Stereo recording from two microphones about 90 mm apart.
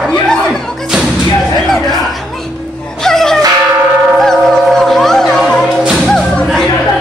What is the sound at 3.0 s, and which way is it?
Music, 5° left (ahead or behind).